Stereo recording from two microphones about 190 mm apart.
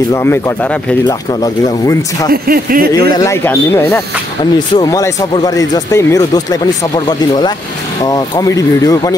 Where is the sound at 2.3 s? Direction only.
50° right (ahead or behind).